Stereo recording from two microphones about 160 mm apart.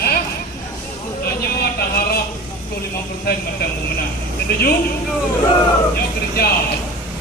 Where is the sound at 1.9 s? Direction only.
70° left (ahead or behind).